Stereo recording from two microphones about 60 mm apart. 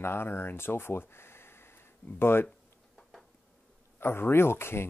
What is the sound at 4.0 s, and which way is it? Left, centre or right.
Speech, left.